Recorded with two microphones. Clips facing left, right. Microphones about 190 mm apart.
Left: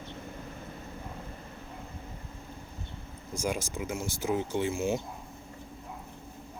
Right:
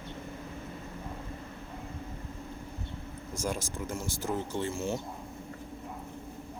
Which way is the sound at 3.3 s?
15° left (ahead or behind).